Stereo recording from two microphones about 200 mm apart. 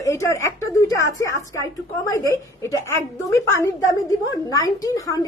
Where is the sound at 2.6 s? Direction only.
15° left (ahead or behind).